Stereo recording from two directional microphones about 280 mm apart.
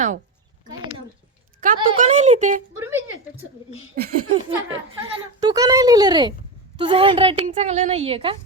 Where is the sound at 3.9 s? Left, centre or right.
Right.